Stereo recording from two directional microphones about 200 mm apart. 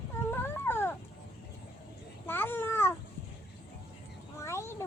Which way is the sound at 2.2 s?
10° left (ahead or behind).